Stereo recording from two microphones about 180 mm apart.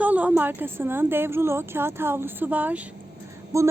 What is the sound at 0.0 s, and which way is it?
A woman's voice, 10° right (ahead or behind).